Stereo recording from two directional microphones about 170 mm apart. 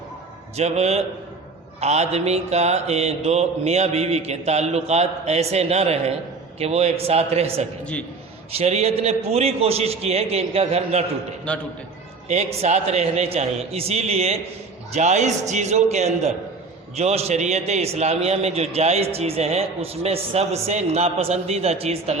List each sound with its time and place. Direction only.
0.5 s a man's voice: 40° right (ahead or behind)
11.5 s a man's voice: 5° left (ahead or behind)
12.3 s a man's voice: 40° right (ahead or behind)